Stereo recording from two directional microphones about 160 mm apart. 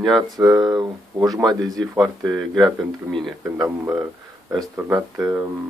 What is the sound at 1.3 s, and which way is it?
Speech, centre (ahead or behind).